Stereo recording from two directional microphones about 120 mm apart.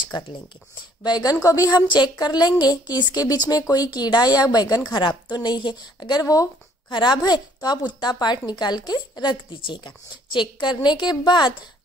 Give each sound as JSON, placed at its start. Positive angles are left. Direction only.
{"t": 0.1, "sound": "a woman's voice", "side_deg": 35}